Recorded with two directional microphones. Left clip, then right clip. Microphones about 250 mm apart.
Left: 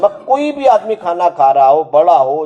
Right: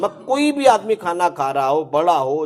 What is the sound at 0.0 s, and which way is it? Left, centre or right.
A man's voice, right.